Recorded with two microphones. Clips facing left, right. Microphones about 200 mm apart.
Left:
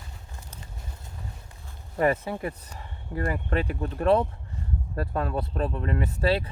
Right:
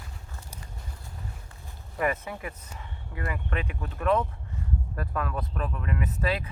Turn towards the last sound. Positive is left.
turn(degrees=30)  # may be behind; listen again after turning